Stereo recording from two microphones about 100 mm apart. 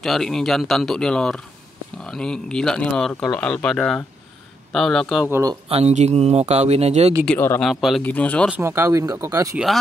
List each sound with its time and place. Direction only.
0.0 s speech: 5° left (ahead or behind)
5.7 s speech: 90° right
7.3 s speech: 20° left (ahead or behind)
7.6 s speech: centre (ahead or behind)
8.0 s speech: 15° left (ahead or behind)
8.5 s speech: 25° right (ahead or behind)